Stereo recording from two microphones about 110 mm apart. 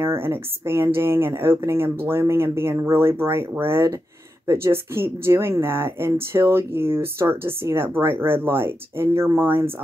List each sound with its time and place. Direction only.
0.0 s speech: 20° right (ahead or behind)